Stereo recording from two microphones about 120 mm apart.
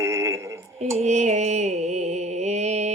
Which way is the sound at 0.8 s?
65° right (ahead or behind).